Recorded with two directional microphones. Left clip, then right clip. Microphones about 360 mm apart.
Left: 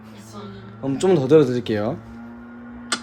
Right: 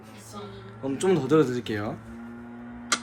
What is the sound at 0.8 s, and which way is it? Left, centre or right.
Speech, left.